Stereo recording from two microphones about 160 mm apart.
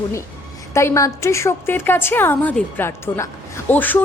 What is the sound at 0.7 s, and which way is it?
Music, 15° left (ahead or behind).